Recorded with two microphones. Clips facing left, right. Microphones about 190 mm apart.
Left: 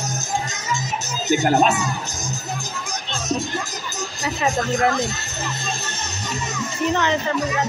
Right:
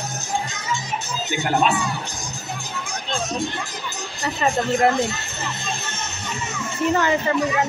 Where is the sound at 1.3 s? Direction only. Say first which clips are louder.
Left 4 dB; 40° left (ahead or behind).